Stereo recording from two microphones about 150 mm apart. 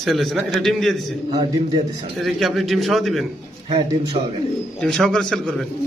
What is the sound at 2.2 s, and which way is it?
Speech, centre (ahead or behind).